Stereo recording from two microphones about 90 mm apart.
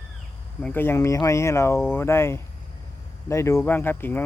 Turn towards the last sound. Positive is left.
turn(degrees=25)  # may be behind; listen again after turning